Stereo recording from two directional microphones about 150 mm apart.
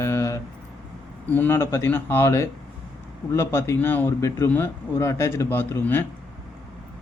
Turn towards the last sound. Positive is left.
turn(degrees=15)  # may be behind; listen again after turning